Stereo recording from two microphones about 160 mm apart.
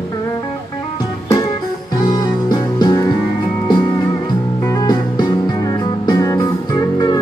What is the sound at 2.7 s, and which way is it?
Music, 25° left (ahead or behind).